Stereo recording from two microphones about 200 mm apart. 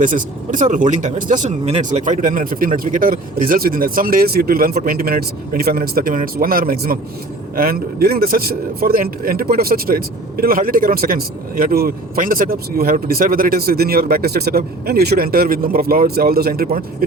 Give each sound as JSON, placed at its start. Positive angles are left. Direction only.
{"t": 0.0, "sound": "a man's voice", "side_deg": -40}